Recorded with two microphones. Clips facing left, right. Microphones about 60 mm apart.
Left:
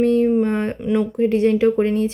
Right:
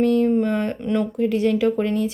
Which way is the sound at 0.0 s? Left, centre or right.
Left.